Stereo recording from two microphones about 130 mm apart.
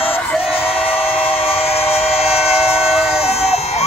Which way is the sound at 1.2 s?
50° left (ahead or behind).